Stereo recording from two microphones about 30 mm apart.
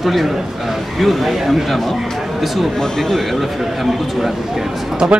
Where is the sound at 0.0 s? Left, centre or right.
Centre.